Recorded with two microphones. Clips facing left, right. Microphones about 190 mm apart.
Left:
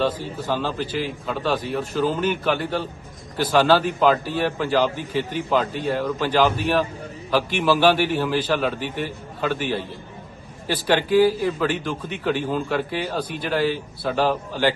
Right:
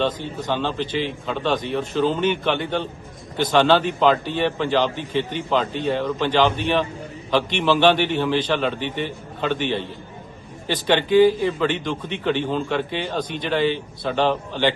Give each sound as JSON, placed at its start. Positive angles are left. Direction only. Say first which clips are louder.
{"t": 0.0, "sound": "a man's voice", "louder": "even", "side_deg": 10}